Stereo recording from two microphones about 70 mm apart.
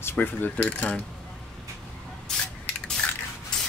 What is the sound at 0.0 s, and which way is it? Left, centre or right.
Speech, left.